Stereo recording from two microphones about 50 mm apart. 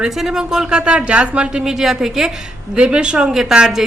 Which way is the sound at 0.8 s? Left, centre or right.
Right.